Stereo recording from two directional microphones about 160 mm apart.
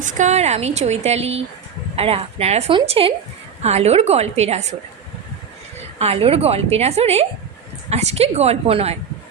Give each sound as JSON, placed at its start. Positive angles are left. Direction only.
{"t": 0.0, "sound": "a woman's voice", "side_deg": -45}
{"t": 6.0, "sound": "a woman's voice", "side_deg": -40}